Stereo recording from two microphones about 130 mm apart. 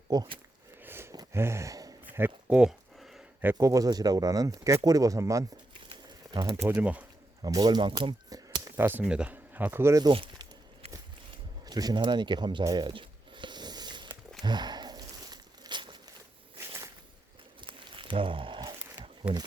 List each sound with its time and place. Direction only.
0.1 s speech: 30° right (ahead or behind)
0.8 s wheeze: 15° right (ahead or behind)
1.1 s a sound: 25° right (ahead or behind)
2.0 s a sound: 15° right (ahead or behind)
3.5 s speech: 25° right (ahead or behind)
6.7 s speech: 10° right (ahead or behind)
7.4 s speech: 30° right (ahead or behind)
8.6 s speech: 15° right (ahead or behind)
10.0 s speech: 40° right (ahead or behind)
11.6 s a sound: 30° right (ahead or behind)
14.4 s crumpling: 35° right (ahead or behind)
17.6 s a sound: 40° right (ahead or behind)
19.2 s speech: 10° right (ahead or behind)